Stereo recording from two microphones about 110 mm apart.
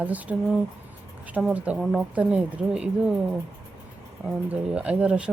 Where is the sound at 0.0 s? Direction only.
15° right (ahead or behind).